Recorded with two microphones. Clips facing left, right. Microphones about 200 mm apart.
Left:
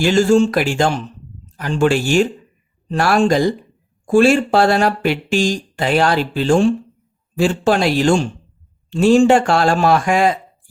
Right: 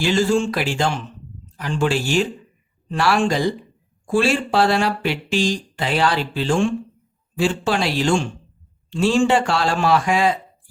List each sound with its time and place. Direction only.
0.0 s speech: 45° left (ahead or behind)